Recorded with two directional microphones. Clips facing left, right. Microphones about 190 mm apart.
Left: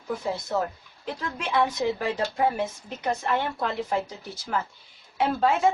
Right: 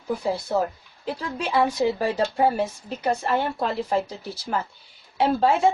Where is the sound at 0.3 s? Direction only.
30° right (ahead or behind).